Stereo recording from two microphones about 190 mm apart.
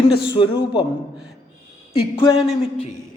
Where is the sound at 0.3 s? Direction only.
25° left (ahead or behind).